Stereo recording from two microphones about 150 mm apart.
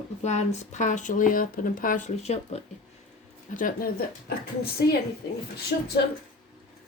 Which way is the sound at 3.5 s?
65° left (ahead or behind).